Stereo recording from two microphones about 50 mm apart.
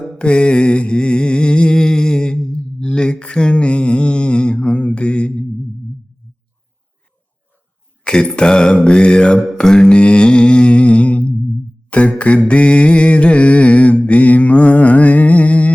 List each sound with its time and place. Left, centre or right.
0.2 s mantra: left
8.0 s mantra: centre